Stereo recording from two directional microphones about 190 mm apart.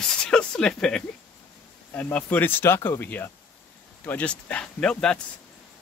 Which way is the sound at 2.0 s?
10° left (ahead or behind).